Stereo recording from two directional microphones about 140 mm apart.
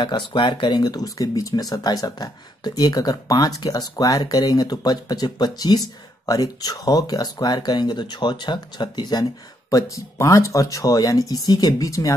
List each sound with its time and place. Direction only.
0.0 s speech: 35° left (ahead or behind)